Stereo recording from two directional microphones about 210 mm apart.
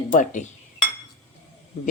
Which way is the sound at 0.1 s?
40° left (ahead or behind).